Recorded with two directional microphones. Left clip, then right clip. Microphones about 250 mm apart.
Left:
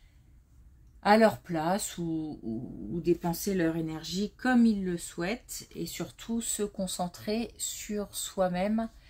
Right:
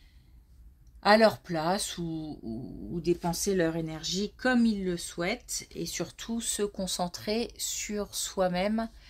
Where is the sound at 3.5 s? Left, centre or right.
Right.